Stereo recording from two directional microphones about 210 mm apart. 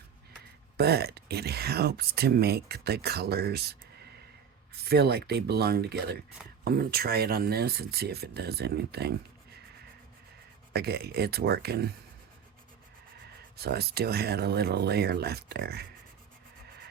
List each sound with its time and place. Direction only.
0.8 s speech: 50° right (ahead or behind)
10.7 s speech: 50° right (ahead or behind)
13.6 s speech: 50° right (ahead or behind)